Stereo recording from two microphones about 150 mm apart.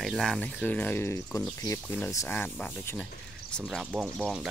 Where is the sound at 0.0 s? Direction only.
Centre (ahead or behind); by 2.0 s 20° left (ahead or behind).